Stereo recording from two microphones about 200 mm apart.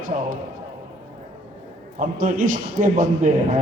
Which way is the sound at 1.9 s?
40° right (ahead or behind).